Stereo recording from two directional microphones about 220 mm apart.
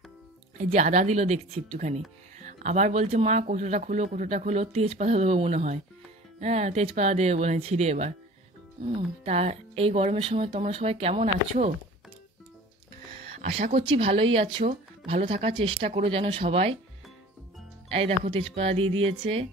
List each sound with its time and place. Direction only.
0.6 s speech: 35° right (ahead or behind)
13.4 s speech: 35° right (ahead or behind)
17.8 s speech: 25° right (ahead or behind)